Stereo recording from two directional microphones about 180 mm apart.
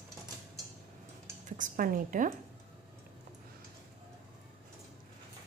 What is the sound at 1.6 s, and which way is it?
Speech, 50° right (ahead or behind).